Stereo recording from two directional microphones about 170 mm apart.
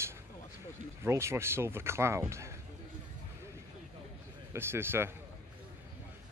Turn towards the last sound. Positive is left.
turn(degrees=-15)  # may be behind; listen again after turning